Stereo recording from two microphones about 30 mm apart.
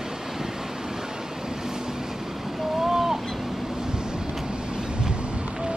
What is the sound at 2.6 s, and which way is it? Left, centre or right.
Vehicle, centre.